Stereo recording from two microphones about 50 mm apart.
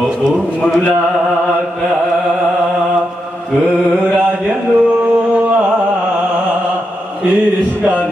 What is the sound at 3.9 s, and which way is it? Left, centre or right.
Mantra, centre.